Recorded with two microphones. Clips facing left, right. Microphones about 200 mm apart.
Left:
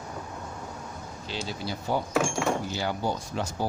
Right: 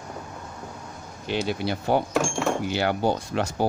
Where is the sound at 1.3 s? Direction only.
65° right (ahead or behind).